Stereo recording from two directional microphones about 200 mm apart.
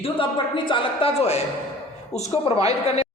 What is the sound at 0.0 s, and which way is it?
A man's voice, 25° left (ahead or behind).